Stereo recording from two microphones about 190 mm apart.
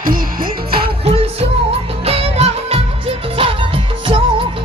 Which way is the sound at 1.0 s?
30° right (ahead or behind).